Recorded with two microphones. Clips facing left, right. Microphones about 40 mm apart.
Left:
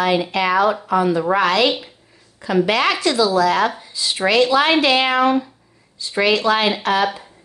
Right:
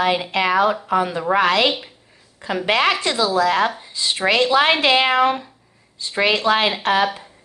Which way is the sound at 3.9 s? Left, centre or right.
Right.